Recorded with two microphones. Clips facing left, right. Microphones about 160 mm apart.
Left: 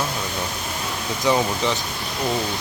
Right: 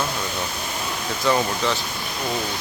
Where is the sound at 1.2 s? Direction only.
15° left (ahead or behind).